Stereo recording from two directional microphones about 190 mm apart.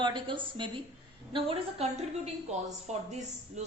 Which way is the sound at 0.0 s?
25° right (ahead or behind).